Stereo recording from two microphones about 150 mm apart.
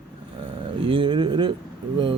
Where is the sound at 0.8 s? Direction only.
35° right (ahead or behind).